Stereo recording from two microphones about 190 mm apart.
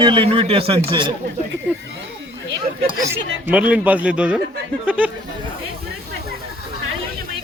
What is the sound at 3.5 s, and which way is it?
A man's voice, 5° right (ahead or behind).